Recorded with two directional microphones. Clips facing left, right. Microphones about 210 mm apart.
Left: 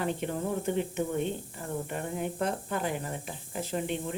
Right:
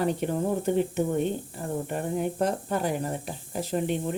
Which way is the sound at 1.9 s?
40° right (ahead or behind).